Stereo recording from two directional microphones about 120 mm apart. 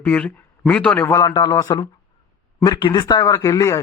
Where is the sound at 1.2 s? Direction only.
35° left (ahead or behind).